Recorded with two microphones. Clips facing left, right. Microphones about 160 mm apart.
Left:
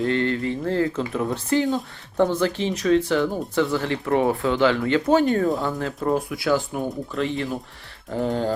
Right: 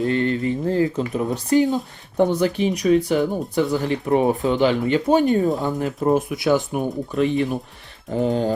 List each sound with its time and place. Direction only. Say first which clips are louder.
0.0 s speech: right 2 dB; 15° right (ahead or behind)